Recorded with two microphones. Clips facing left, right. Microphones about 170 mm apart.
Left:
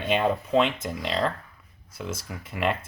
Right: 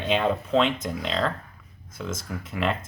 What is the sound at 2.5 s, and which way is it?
Speech, 10° left (ahead or behind).